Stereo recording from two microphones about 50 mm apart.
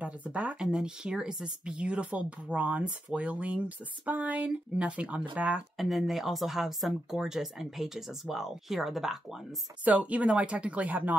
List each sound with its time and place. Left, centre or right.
0.0 s speech: right
0.6 s speech: centre
5.8 s speech: centre
9.8 s speech: right